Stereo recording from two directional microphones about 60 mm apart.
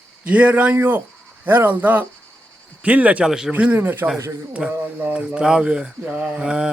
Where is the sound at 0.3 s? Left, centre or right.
Right.